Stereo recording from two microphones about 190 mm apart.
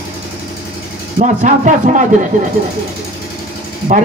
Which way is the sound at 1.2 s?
40° right (ahead or behind).